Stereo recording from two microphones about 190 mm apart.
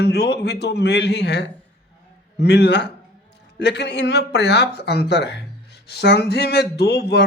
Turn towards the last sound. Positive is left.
turn(degrees=60)  # may be behind; listen again after turning